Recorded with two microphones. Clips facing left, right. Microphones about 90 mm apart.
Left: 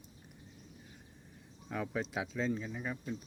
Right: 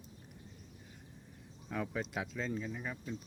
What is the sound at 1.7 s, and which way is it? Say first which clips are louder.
Speech: left 1 dB; centre (ahead or behind).